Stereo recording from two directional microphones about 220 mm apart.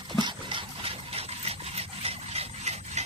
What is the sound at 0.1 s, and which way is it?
Ratchet, 20° right (ahead or behind).